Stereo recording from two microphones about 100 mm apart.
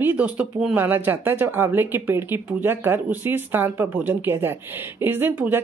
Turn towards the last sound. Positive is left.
turn(degrees=-20)  # may be behind; listen again after turning